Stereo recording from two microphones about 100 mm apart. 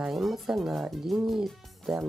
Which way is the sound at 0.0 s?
Centre (ahead or behind).